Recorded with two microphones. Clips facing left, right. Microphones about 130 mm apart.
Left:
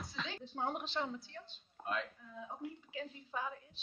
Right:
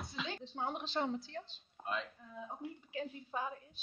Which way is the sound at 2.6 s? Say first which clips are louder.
Right 3 dB; 20° right (ahead or behind).